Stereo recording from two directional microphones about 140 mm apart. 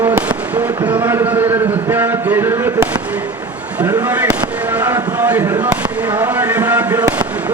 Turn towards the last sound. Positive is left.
turn(degrees=-10)  # may be behind; listen again after turning